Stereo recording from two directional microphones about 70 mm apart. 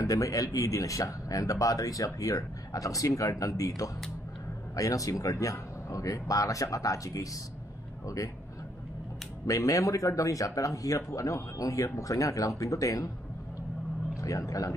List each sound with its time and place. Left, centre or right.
0.0 s speech: left
9.5 s speech: left
14.2 s speech: left